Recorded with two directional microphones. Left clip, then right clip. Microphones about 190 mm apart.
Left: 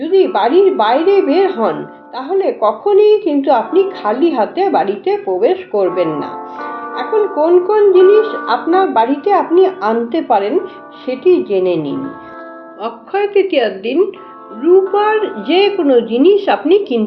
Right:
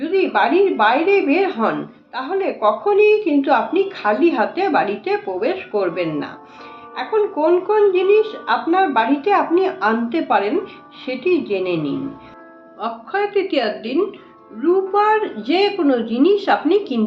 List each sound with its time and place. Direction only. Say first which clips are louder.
0.1 s a woman's voice: left 5 dB; 20° left (ahead or behind)
12.8 s a woman's voice: left 4 dB; 15° left (ahead or behind)